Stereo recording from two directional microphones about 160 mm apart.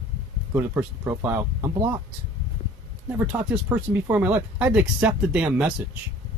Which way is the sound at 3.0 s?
10° right (ahead or behind).